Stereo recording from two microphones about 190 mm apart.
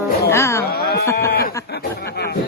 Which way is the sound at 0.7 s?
55° left (ahead or behind).